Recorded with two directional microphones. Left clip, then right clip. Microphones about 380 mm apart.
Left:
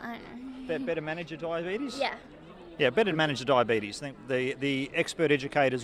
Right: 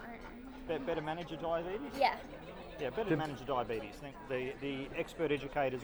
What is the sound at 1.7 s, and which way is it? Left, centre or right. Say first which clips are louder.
Speech: left 2 dB; left.